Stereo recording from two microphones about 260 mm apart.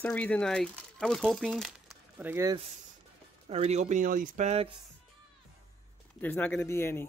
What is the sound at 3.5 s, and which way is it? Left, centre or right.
Speech, right.